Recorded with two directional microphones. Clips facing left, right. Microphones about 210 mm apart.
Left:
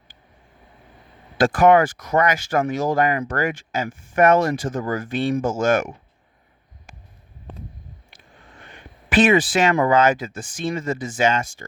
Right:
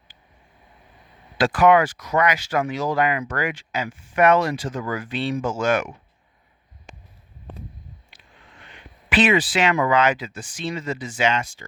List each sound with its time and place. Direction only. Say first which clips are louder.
1.4 s speech: left 2 dB; 45° left (ahead or behind)
8.1 s speech: left 3 dB; 45° left (ahead or behind)